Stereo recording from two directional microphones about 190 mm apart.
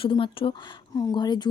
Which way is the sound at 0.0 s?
25° left (ahead or behind).